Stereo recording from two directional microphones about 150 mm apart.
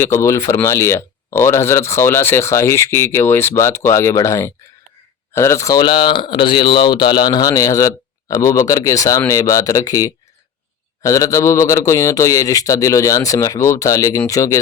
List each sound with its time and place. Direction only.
0.0 s speech: 20° left (ahead or behind)